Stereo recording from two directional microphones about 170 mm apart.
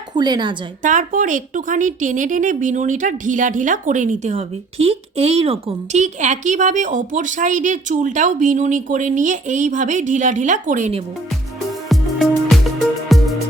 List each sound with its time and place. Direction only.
0.1 s a woman's voice: 25° right (ahead or behind)
0.8 s a woman's voice: 50° right (ahead or behind)
11.9 s music: centre (ahead or behind)